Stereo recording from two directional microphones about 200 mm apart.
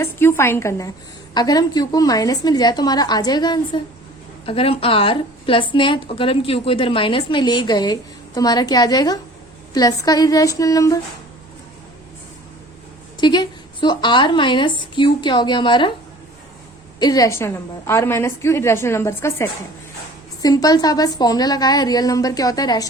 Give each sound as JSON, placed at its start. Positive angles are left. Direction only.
{"t": 0.0, "sound": "a woman's voice", "side_deg": 15}
{"t": 13.1, "sound": "a woman's voice", "side_deg": 20}
{"t": 17.0, "sound": "a woman's voice", "side_deg": 20}